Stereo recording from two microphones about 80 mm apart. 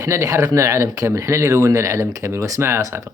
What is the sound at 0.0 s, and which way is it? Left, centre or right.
Speech, right.